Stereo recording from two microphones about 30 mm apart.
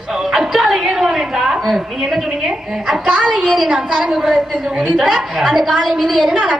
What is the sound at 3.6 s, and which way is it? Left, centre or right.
Speech, centre.